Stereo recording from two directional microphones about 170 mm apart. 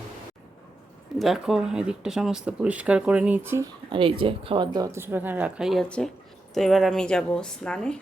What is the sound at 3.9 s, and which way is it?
Speech, 30° right (ahead or behind).